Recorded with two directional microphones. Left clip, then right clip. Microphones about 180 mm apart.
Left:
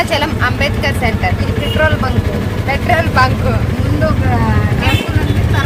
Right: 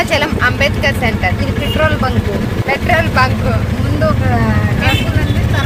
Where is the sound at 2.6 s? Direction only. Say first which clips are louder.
Right 1 dB; centre (ahead or behind).